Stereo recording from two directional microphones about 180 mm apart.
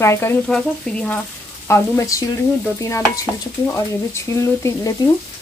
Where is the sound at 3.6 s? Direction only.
15° left (ahead or behind).